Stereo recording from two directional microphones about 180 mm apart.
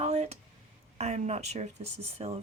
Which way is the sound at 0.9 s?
40° right (ahead or behind).